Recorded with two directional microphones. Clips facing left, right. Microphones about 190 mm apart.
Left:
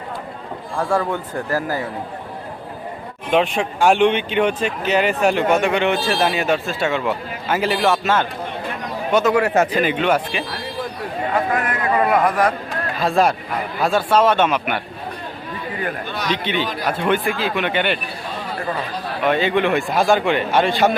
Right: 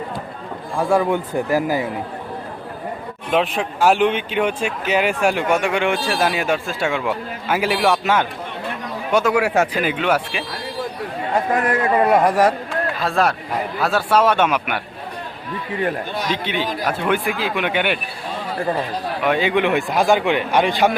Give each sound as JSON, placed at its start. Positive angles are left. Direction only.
{"t": 0.8, "sound": "speech", "side_deg": -10}
{"t": 3.2, "sound": "speech", "side_deg": 0}
{"t": 11.6, "sound": "a man's voice", "side_deg": -30}
{"t": 13.0, "sound": "speech", "side_deg": 0}
{"t": 16.3, "sound": "speech", "side_deg": -10}
{"t": 19.2, "sound": "speech", "side_deg": -10}